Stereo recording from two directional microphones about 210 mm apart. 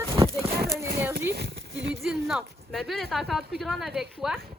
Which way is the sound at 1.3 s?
55° right (ahead or behind).